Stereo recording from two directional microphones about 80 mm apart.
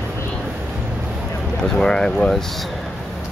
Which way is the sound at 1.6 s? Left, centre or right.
Centre.